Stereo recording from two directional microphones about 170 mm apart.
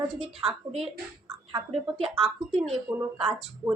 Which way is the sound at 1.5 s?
35° right (ahead or behind).